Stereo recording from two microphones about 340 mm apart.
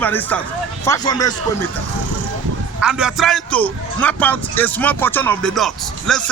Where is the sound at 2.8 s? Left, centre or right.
Centre.